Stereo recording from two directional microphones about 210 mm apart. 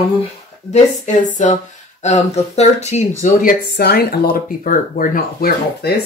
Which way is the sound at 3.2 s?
45° left (ahead or behind).